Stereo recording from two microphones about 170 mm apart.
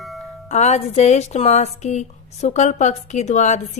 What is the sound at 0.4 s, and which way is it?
A woman's voice, 40° left (ahead or behind).